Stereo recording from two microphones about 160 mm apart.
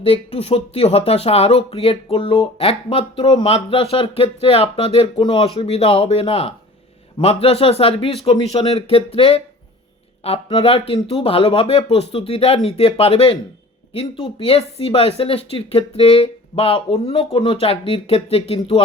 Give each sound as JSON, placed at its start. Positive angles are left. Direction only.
{"t": 0.0, "sound": "speech", "side_deg": 40}